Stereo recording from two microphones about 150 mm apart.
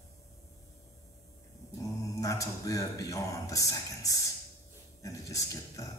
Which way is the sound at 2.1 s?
20° left (ahead or behind).